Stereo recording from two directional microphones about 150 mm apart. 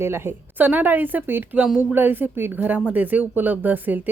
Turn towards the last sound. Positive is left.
turn(degrees=-10)  # may be behind; listen again after turning